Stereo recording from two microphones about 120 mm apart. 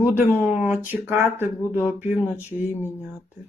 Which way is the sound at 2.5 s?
15° right (ahead or behind).